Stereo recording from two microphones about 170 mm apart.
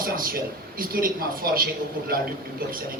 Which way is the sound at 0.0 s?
55° right (ahead or behind).